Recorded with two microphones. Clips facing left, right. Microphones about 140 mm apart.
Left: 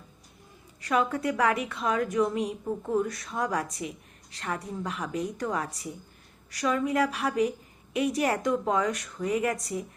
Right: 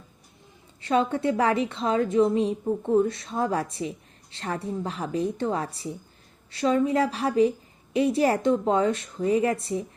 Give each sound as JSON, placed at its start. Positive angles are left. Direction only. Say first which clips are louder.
{"t": 0.8, "sound": "a woman's voice", "louder": "right 3 dB", "side_deg": -25}